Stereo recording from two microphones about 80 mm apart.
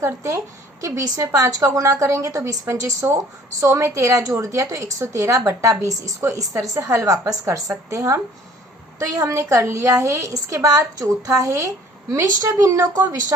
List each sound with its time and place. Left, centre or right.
0.0 s a woman's voice: right